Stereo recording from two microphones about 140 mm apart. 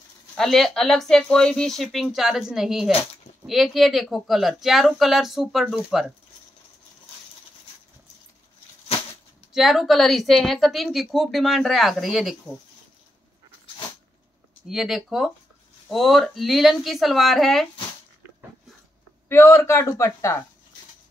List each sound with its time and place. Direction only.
0.4 s a woman's voice: 5° left (ahead or behind)
9.5 s a woman's voice: centre (ahead or behind)
14.7 s a woman's voice: centre (ahead or behind)
19.2 s speech: 20° left (ahead or behind)